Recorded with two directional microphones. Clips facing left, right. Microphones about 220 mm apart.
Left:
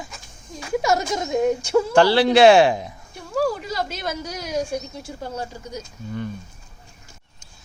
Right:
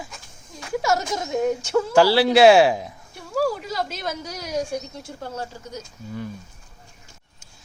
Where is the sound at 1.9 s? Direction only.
5° right (ahead or behind).